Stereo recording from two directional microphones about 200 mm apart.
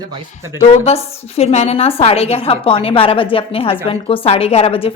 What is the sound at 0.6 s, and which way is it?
A woman's voice, 30° left (ahead or behind).